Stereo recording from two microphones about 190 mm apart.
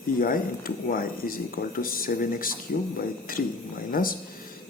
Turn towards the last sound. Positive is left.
turn(degrees=50)  # may be behind; listen again after turning